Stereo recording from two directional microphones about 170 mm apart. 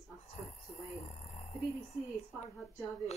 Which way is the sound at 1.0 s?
40° left (ahead or behind).